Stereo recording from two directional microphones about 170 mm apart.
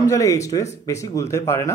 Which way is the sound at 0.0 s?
20° left (ahead or behind).